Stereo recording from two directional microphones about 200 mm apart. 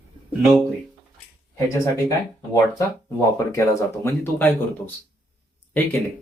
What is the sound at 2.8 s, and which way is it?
Speech, 15° left (ahead or behind).